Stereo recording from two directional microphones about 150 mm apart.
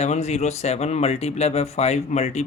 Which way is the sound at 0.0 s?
50° left (ahead or behind).